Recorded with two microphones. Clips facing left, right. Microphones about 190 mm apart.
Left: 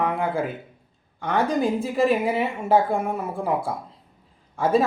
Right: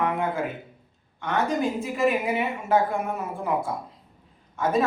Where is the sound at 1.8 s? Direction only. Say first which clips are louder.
Left 3 dB; 30° left (ahead or behind).